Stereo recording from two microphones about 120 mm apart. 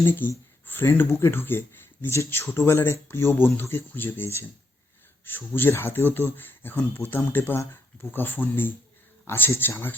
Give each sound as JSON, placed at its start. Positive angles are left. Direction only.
{"t": 0.0, "sound": "speech", "side_deg": 20}
{"t": 5.5, "sound": "speech", "side_deg": 20}